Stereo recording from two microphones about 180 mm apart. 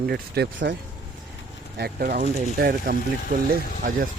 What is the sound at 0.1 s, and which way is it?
Speech, 65° right (ahead or behind).